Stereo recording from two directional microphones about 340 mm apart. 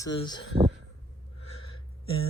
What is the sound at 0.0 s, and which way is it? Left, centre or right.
Speech, centre.